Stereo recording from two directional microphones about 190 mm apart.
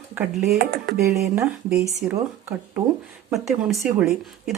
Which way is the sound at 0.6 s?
55° right (ahead or behind).